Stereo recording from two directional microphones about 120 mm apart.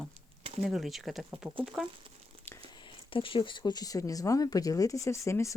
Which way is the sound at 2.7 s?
45° left (ahead or behind).